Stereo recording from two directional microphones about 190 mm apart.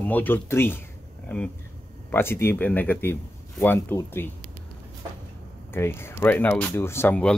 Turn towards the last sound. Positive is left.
turn(degrees=10)  # may be behind; listen again after turning